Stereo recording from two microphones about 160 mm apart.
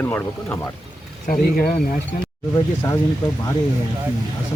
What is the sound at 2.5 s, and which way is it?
Speech, 20° left (ahead or behind).